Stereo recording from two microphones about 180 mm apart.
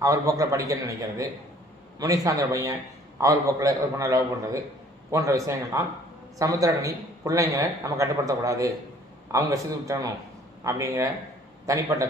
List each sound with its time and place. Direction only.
0.0 s a man's voice: 20° right (ahead or behind)